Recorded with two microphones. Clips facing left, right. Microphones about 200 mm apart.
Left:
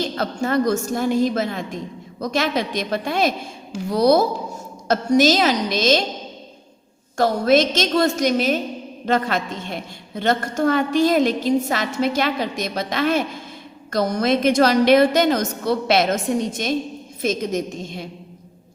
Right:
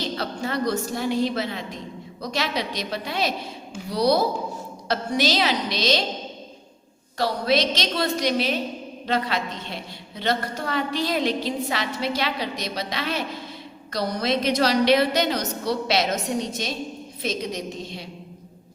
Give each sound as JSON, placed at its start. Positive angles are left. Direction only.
{"t": 0.2, "sound": "a woman's voice", "side_deg": 50}
{"t": 7.2, "sound": "a woman's voice", "side_deg": 50}